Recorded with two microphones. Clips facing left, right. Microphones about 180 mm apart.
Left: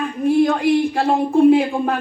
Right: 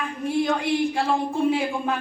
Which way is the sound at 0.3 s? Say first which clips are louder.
Left 8 dB; 55° left (ahead or behind).